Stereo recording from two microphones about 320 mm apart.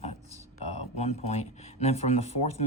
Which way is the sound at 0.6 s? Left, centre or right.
Centre.